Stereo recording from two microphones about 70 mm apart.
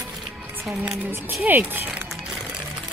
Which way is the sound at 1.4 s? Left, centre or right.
Right.